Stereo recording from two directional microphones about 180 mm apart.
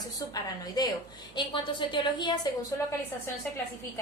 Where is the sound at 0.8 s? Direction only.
20° left (ahead or behind).